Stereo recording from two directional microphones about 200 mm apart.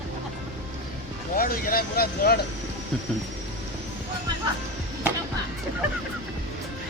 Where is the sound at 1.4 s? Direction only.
45° left (ahead or behind).